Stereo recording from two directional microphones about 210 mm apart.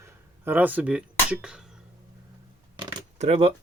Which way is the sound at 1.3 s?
5° right (ahead or behind).